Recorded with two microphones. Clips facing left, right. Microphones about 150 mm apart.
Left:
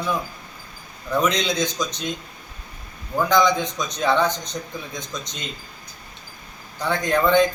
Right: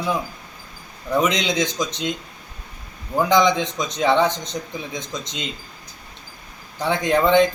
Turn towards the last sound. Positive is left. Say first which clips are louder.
# right 2 dB
turn(degrees=-25)  # may be behind; listen again after turning